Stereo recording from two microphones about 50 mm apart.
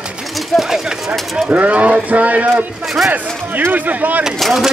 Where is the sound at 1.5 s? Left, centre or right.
Right.